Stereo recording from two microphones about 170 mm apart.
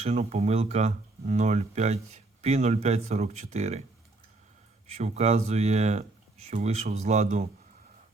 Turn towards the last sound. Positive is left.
turn(degrees=-45)  # may be behind; listen again after turning